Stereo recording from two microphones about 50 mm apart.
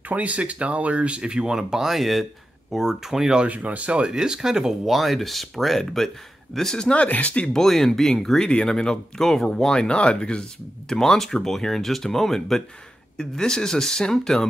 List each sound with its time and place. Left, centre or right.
0.1 s speech: right; by 3.3 s centre
3.3 s speech: right; by 6.9 s centre
6.9 s speech: left
7.5 s speech: centre
10.9 s speech: centre